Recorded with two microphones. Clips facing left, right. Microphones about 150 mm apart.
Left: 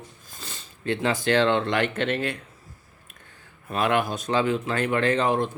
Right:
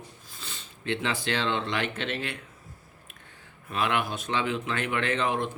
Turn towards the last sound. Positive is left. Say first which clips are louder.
# left 5 dB
turn(degrees=35)  # may be behind; listen again after turning